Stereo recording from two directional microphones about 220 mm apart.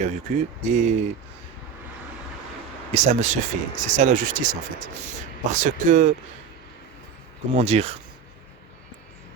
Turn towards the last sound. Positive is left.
turn(degrees=-30)  # may be behind; listen again after turning